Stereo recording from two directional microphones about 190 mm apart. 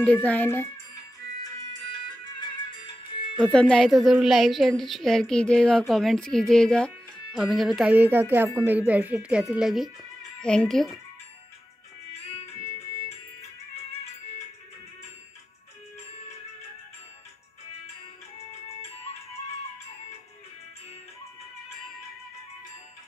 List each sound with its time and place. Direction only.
0.0 s a child's voice: 5° left (ahead or behind)
1.4 s music: 20° left (ahead or behind)
3.3 s a woman's voice: 5° left (ahead or behind)